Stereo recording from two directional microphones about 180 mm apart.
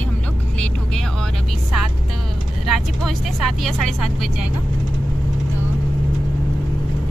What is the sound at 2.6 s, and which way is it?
Speech, centre (ahead or behind).